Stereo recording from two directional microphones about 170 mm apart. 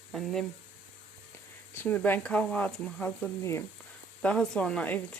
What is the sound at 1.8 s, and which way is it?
Speech, 10° left (ahead or behind).